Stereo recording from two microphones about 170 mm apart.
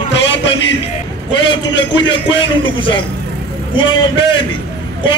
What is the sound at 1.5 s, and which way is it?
A man's voice, 30° left (ahead or behind).